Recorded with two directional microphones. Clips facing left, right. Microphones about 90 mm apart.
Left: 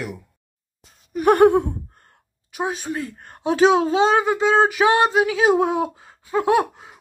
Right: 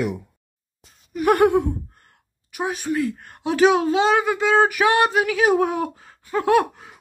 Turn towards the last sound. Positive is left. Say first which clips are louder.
# right 1 dB
turn(degrees=20)  # may be behind; listen again after turning